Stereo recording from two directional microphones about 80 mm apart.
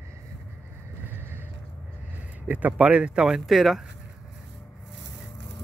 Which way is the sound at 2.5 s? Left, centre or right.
Centre.